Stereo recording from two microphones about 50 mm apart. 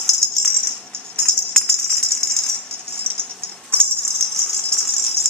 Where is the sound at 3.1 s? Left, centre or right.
Centre.